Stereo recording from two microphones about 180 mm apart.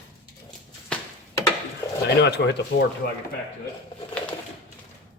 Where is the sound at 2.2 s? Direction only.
70° left (ahead or behind).